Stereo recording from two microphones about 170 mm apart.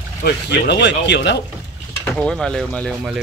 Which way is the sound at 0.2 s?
80° left.